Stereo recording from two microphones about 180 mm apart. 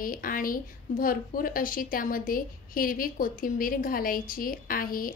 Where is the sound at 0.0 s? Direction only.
50° left (ahead or behind).